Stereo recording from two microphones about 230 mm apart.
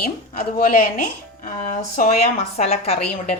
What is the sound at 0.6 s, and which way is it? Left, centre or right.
A woman's voice, left.